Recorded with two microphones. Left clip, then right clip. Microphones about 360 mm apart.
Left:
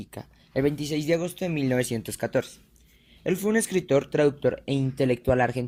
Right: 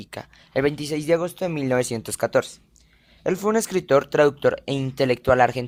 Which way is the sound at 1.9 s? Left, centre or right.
Right.